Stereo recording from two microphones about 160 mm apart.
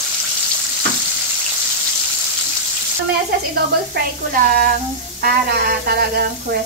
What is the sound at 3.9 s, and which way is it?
Speech, 60° right (ahead or behind).